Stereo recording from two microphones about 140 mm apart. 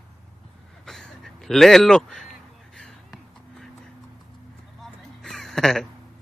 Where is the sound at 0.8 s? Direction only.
5° left (ahead or behind).